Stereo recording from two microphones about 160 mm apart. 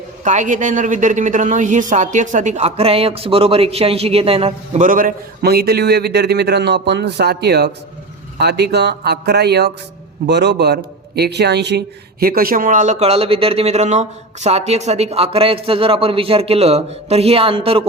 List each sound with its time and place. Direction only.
0.3 s a woman's voice: 50° right (ahead or behind)
4.8 s a man's voice: 60° right (ahead or behind); by 11.8 s 90° right
12.2 s speech: 65° right (ahead or behind); by 17.8 s 35° right (ahead or behind)